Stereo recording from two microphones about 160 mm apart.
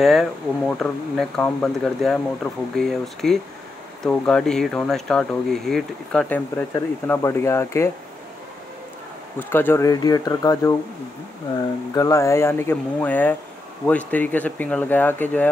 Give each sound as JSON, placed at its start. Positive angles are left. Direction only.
{"t": 0.0, "sound": "speech", "side_deg": 0}
{"t": 9.4, "sound": "speech", "side_deg": 15}
{"t": 11.9, "sound": "speech", "side_deg": 20}